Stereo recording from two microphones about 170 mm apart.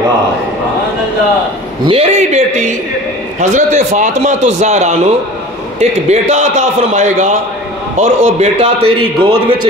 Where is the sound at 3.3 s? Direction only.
45° right (ahead or behind).